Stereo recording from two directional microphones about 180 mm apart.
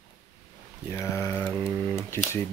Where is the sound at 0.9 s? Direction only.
15° left (ahead or behind).